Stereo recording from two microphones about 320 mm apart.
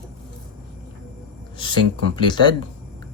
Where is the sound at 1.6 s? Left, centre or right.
Centre.